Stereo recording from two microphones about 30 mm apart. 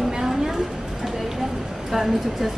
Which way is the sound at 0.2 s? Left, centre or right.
Centre.